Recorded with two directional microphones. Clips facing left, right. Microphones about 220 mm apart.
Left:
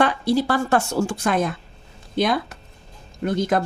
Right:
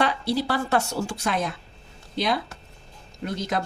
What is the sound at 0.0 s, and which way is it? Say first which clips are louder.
A woman's voice: left 5 dB; 50° left (ahead or behind).